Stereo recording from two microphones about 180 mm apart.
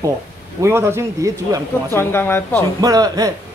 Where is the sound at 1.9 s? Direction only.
15° left (ahead or behind).